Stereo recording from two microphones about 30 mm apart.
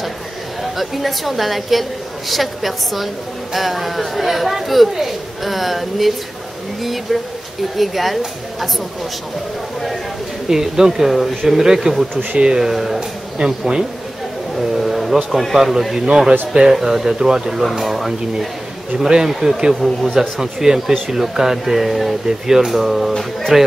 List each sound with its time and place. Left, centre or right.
0.7 s speech: centre
10.5 s speech: centre
12.3 s speech: right
12.5 s speech: centre
13.4 s speech: right
14.8 s a sound: centre
15.5 s speech: centre
16.1 s speech: right
17.7 s speech: centre
19.2 s speech: centre
19.7 s speech: centre
20.2 s speech: centre
23.5 s speech: centre